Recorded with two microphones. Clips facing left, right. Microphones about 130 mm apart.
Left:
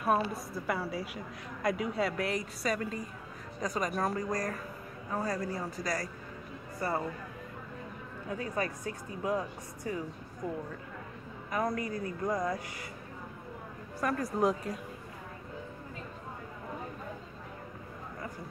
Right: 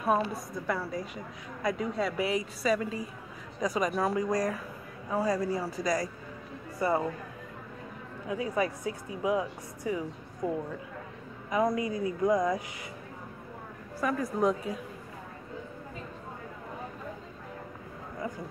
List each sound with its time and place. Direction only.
0.0 s a woman's voice: centre (ahead or behind); by 7.1 s 15° right (ahead or behind)
8.3 s speech: 10° right (ahead or behind)
11.5 s speech: 15° right (ahead or behind)
14.0 s a woman's voice: centre (ahead or behind)